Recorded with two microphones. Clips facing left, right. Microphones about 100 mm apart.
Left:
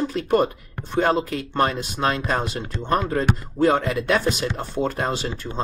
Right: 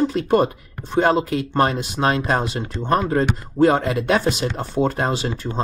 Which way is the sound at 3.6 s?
30° right (ahead or behind).